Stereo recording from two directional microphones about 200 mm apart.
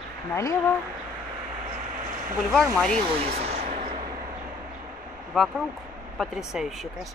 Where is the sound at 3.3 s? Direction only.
35° right (ahead or behind).